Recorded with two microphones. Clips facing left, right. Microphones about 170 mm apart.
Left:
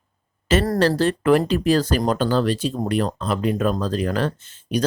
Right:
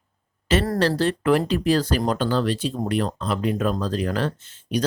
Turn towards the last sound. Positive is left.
turn(degrees=45)  # may be behind; listen again after turning